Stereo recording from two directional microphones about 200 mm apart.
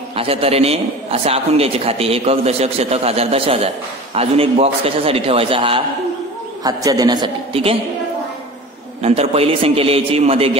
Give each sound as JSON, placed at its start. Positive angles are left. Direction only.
{"t": 0.1, "sound": "a man's voice", "side_deg": -30}
{"t": 9.0, "sound": "a man's voice", "side_deg": -30}